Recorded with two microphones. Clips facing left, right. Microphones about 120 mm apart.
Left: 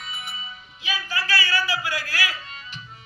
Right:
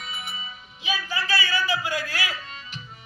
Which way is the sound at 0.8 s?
20° right (ahead or behind).